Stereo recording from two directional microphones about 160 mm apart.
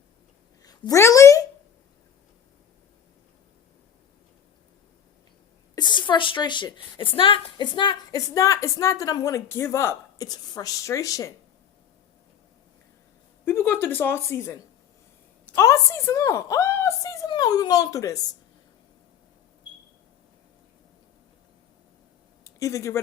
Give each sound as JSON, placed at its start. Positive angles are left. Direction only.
{"t": 0.6, "sound": "a sound", "side_deg": 25}
{"t": 5.7, "sound": "a woman's voice", "side_deg": 30}
{"t": 13.4, "sound": "a woman's voice", "side_deg": 15}
{"t": 22.4, "sound": "speech", "side_deg": 20}